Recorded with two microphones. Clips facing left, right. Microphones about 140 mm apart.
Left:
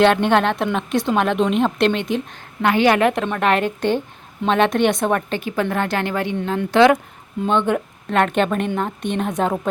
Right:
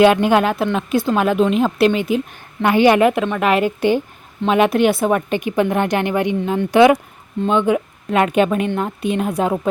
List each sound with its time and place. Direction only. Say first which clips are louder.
0.0 s a woman's voice: right 2 dB; 5° right (ahead or behind)
6.3 s a woman's voice: right 1 dB; 5° right (ahead or behind)